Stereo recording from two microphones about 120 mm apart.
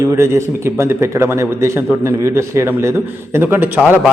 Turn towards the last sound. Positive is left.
turn(degrees=-15)  # may be behind; listen again after turning